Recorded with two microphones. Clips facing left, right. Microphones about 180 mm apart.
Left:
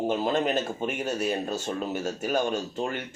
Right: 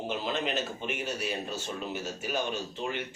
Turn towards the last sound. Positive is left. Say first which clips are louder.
# left 4 dB
turn(degrees=45)  # may be behind; listen again after turning